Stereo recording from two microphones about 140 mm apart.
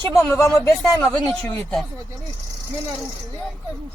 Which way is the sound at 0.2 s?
15° left (ahead or behind).